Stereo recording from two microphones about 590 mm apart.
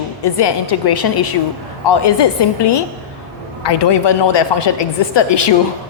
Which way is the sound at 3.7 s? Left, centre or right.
Left.